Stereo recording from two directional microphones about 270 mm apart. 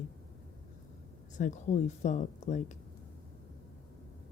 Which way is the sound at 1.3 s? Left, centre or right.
Left.